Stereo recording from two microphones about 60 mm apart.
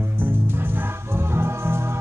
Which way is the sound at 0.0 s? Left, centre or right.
Right.